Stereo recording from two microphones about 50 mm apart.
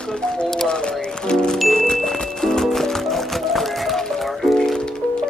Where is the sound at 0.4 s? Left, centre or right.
Centre.